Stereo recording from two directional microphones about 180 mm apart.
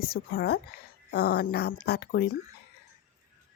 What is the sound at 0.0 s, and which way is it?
Speech, 55° left (ahead or behind).